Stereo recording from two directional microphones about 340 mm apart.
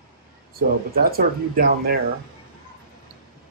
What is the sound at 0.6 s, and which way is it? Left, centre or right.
Speech, right.